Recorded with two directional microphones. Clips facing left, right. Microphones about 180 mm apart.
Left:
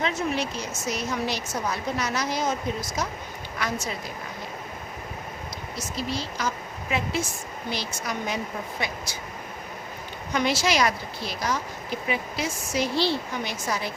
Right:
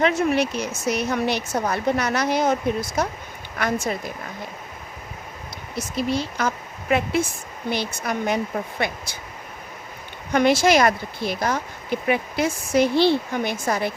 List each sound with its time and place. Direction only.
0.0 s a woman's voice: 65° right (ahead or behind)
5.7 s a woman's voice: 55° right (ahead or behind)
10.3 s a woman's voice: 55° right (ahead or behind)